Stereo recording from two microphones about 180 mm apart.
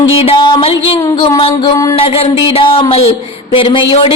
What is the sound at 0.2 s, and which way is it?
Music, 30° left (ahead or behind).